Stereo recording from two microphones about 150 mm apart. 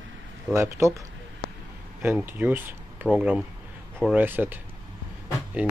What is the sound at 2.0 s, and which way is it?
Speech, 10° right (ahead or behind).